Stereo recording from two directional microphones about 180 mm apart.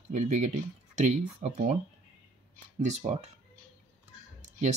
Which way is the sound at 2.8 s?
40° right (ahead or behind).